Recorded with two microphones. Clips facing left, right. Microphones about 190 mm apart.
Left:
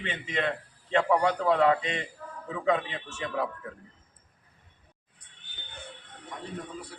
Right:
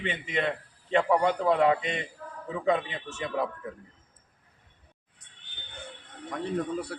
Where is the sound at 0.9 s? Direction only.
20° right (ahead or behind).